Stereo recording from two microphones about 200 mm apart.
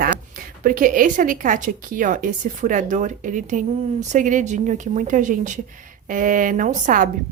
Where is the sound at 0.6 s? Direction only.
45° right (ahead or behind).